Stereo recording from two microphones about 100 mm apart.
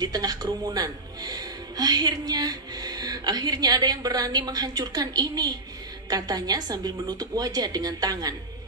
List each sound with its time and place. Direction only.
0.0 s speech: 40° right (ahead or behind)